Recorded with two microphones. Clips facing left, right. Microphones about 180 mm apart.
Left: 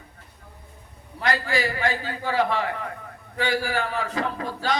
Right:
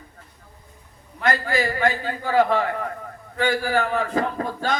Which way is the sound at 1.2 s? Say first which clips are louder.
Right 2 dB; 45° right (ahead or behind).